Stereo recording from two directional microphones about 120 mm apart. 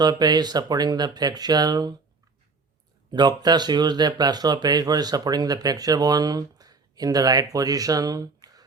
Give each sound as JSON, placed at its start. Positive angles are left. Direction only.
{"t": 0.0, "sound": "speech", "side_deg": -35}
{"t": 3.1, "sound": "speech", "side_deg": -35}